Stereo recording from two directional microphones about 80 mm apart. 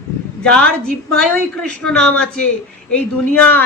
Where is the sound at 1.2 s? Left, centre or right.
Centre.